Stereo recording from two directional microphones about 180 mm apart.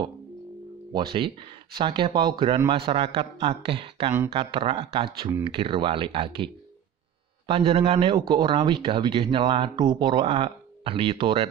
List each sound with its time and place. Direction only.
0.9 s a man's voice: 25° right (ahead or behind)